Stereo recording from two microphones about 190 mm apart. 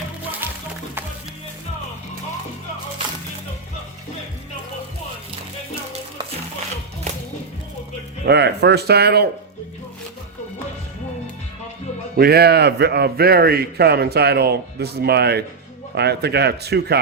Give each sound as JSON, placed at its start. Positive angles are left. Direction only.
{"t": 8.2, "sound": "a man's voice", "side_deg": -60}
{"t": 12.1, "sound": "a man's voice", "side_deg": -55}